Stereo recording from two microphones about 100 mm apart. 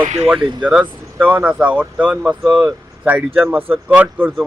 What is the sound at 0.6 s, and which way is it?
Speech, 10° right (ahead or behind).